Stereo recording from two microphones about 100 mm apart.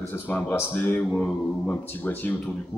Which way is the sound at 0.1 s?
20° left (ahead or behind).